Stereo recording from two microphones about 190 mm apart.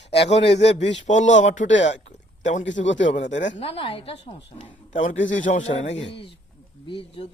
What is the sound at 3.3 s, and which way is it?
Speech, 70° left (ahead or behind).